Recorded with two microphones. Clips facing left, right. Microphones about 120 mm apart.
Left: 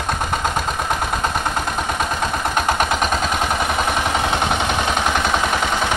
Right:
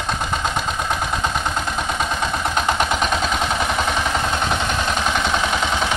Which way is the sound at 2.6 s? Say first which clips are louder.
Left 1 dB; 5° left (ahead or behind).